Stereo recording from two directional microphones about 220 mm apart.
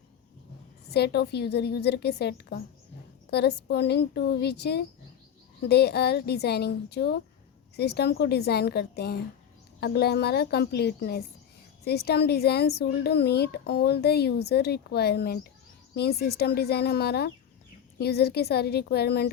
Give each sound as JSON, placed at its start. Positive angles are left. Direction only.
{"t": 0.9, "sound": "speech", "side_deg": 50}